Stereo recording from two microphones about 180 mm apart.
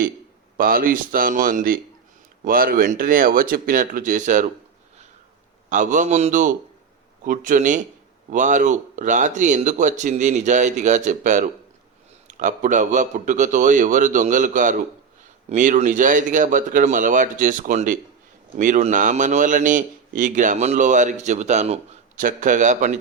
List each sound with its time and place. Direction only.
0.5 s a man's voice: 55° right (ahead or behind)
5.6 s a man's voice: 45° right (ahead or behind)